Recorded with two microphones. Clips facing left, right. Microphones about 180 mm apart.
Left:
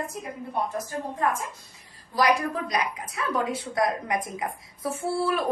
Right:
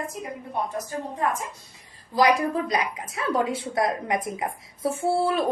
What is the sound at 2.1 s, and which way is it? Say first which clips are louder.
A woman's voice: right 3 dB; 25° right (ahead or behind).